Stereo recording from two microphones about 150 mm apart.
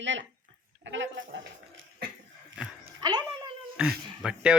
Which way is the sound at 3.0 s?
30° right (ahead or behind).